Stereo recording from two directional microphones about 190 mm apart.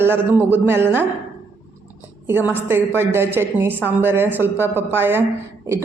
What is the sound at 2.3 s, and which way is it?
Speech, 10° right (ahead or behind).